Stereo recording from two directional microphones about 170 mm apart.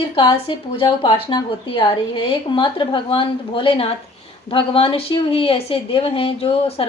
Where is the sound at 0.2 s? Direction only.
30° left (ahead or behind).